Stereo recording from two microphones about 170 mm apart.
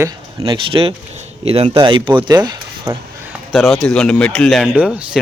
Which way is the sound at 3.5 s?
Centre (ahead or behind).